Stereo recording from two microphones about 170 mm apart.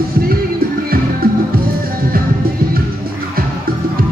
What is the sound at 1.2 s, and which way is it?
Music, 60° right (ahead or behind).